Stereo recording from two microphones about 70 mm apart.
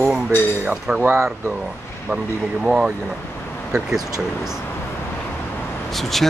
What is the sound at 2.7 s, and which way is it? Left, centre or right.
Speech, centre.